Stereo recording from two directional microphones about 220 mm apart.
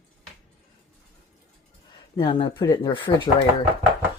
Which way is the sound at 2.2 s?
25° left (ahead or behind).